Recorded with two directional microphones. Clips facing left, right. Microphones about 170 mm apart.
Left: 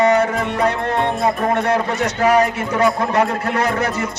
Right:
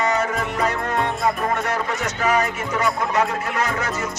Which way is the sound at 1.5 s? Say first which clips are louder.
Left 6 dB; 30° left (ahead or behind).